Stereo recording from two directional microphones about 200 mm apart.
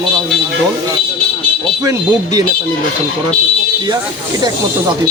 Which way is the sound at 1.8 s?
20° right (ahead or behind).